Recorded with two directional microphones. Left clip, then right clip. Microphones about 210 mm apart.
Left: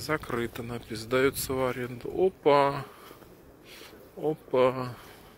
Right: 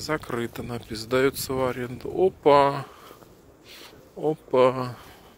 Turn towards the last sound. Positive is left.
turn(degrees=-25)  # may be behind; listen again after turning